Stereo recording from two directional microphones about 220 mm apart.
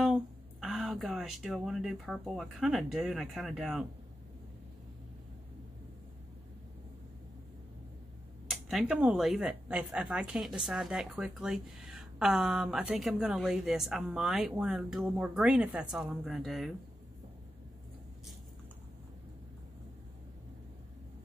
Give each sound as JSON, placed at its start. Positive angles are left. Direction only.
{"t": 0.0, "sound": "speech", "side_deg": 0}
{"t": 8.5, "sound": "speech", "side_deg": 0}